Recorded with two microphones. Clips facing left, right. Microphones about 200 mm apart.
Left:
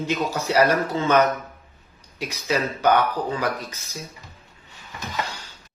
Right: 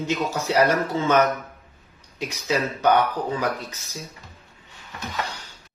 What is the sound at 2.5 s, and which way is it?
Speech, 15° right (ahead or behind).